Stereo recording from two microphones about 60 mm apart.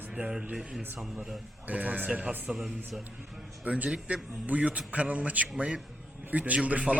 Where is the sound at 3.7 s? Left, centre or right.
Centre.